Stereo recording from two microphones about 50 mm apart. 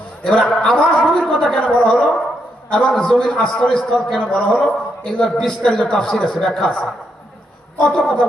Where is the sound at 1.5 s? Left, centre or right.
Centre.